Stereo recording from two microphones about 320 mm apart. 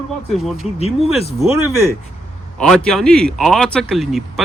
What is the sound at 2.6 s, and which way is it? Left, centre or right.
Speech, centre.